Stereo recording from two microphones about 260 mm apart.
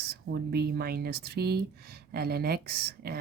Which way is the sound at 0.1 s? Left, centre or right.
Right.